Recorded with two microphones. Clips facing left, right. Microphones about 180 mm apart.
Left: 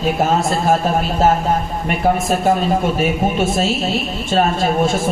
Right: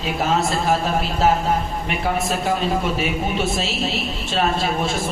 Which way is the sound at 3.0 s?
45° left (ahead or behind).